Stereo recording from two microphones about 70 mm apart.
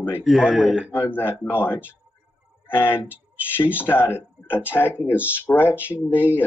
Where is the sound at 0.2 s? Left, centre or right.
Centre.